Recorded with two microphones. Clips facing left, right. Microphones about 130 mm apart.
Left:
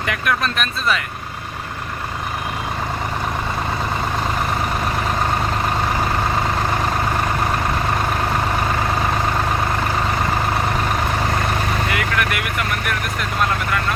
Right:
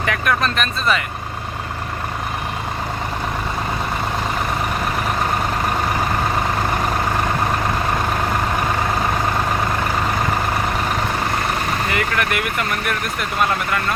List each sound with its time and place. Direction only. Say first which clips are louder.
0.0 s speech: right 2 dB; centre (ahead or behind)
11.9 s speech: right 1 dB; centre (ahead or behind)